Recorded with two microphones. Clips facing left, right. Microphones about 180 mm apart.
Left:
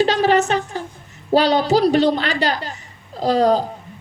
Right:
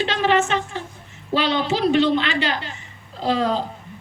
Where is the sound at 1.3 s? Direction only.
40° left (ahead or behind).